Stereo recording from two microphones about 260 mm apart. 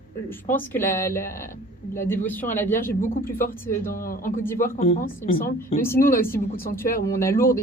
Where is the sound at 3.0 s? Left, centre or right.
Left.